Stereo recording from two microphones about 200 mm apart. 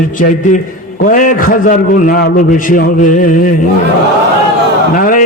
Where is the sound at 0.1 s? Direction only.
40° left (ahead or behind).